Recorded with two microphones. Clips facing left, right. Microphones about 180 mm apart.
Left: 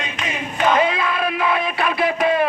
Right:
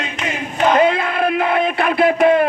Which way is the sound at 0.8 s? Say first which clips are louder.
Right 4 dB; 60° right (ahead or behind).